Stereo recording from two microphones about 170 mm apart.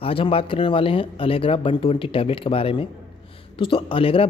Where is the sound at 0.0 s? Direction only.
35° left (ahead or behind).